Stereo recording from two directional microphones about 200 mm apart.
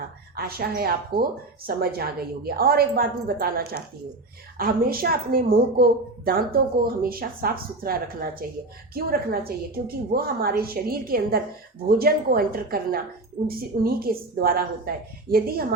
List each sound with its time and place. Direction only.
0.3 s a woman's voice: 50° right (ahead or behind)